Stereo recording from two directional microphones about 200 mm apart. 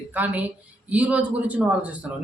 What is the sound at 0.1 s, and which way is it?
A woman's voice, 10° right (ahead or behind).